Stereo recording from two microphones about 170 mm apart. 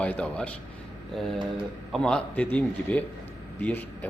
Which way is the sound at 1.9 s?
5° left (ahead or behind).